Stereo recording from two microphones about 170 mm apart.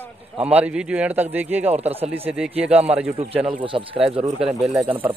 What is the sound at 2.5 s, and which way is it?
Speech, 10° right (ahead or behind).